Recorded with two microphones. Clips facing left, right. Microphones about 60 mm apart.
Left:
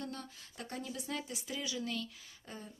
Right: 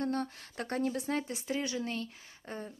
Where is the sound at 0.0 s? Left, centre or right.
Right.